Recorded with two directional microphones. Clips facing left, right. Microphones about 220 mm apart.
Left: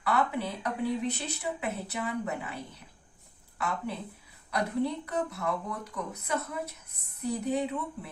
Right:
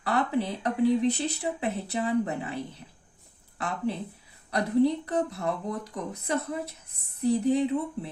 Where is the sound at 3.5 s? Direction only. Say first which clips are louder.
Right 4 dB; 30° right (ahead or behind).